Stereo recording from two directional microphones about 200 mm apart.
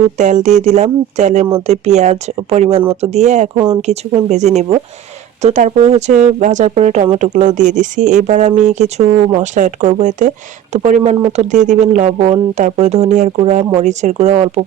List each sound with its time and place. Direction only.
0.2 s speech: 35° right (ahead or behind)